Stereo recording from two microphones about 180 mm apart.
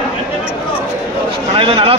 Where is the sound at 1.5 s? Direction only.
30° right (ahead or behind).